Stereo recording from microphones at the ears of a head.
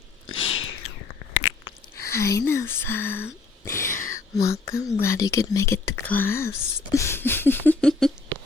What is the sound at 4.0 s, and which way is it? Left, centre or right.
Speech, left.